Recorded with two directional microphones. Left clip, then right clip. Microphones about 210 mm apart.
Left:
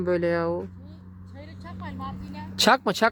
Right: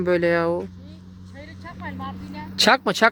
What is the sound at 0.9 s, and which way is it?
Vehicle, 55° left (ahead or behind).